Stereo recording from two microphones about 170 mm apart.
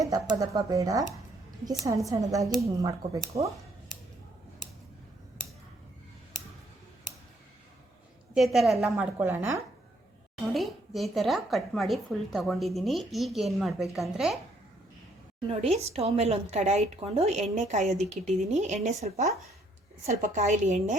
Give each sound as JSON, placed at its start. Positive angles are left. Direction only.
{"t": 0.0, "sound": "speech", "side_deg": -20}
{"t": 8.3, "sound": "a woman's voice", "side_deg": 0}
{"t": 8.9, "sound": "a woman's voice", "side_deg": -10}
{"t": 10.5, "sound": "a woman's voice", "side_deg": 0}
{"t": 15.4, "sound": "a woman's voice", "side_deg": -35}